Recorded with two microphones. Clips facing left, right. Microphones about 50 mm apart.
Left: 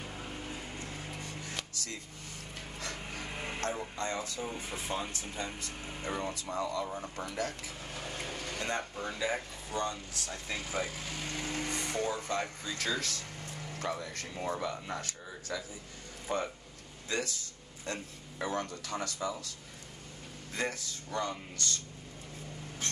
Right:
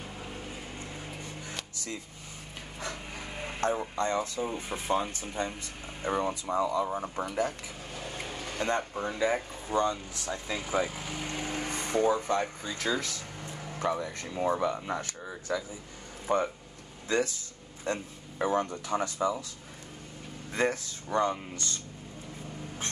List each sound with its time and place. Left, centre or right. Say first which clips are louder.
0.0 s a sound: right 1 dB; centre
0.7 s vehicle: right 1 dB; right
1.2 s music: right 1 dB; centre
2.8 s wood: right 3 dB; centre
3.3 s a sound: right 1 dB; centre
3.9 s speech: right 6 dB; right
4.5 s speech: right 6 dB; right
5.4 s speech: right 6 dB; right
6.0 s speech: right 7 dB; centre
8.0 s vehicle: right 1 dB; centre
8.5 s speech: right 7 dB; right
20.5 s speech: right 7 dB; right